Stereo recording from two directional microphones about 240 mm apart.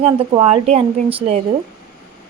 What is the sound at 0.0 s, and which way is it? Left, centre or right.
Speech, right.